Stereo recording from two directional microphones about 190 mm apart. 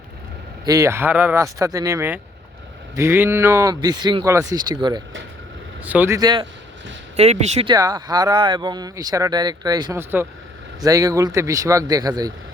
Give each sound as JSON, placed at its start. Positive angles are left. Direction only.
{"t": 0.6, "sound": "speech", "side_deg": -15}
{"t": 5.8, "sound": "speech", "side_deg": -10}
{"t": 7.2, "sound": "speech", "side_deg": -35}
{"t": 7.7, "sound": "speech", "side_deg": -20}